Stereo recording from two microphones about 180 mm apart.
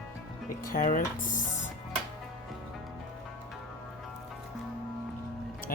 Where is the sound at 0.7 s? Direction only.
50° left (ahead or behind).